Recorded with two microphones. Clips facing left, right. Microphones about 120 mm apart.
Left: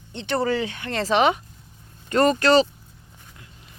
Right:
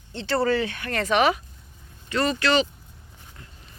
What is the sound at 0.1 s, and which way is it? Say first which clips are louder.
Speech: right 1 dB; 20° left (ahead or behind).